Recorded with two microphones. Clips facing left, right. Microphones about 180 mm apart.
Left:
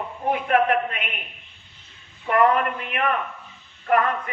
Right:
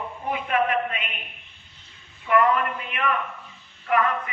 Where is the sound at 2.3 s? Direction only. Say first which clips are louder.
Even; 45° left (ahead or behind).